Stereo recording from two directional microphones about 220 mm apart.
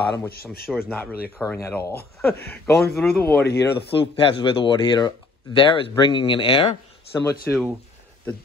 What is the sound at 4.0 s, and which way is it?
Speech, 25° left (ahead or behind).